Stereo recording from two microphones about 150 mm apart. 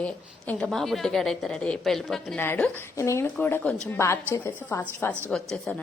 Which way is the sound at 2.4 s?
15° left (ahead or behind).